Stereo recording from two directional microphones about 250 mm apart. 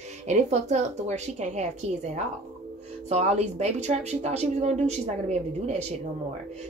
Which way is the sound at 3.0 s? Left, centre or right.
Right.